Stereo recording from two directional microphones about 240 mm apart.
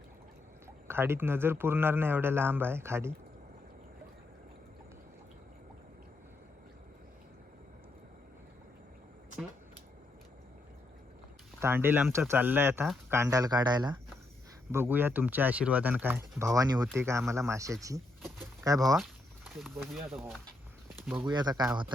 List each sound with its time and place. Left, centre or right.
0.9 s a man's voice: centre
11.6 s a man's voice: centre
18.9 s a sound: centre
19.8 s speech: centre
21.2 s a man's voice: centre